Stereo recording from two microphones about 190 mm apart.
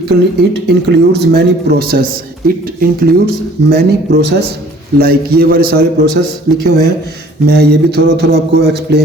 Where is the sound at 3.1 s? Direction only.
55° right (ahead or behind).